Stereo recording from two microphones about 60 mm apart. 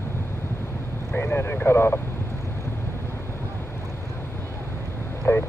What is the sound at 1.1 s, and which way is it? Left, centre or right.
Vehicle, left.